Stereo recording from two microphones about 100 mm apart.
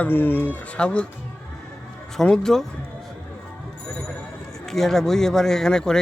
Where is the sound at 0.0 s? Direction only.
20° left (ahead or behind).